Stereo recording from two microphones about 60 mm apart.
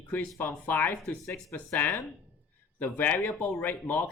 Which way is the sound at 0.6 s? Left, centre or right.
Left.